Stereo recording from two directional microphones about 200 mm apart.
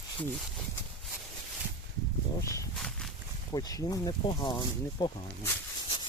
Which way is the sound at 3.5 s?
20° left (ahead or behind).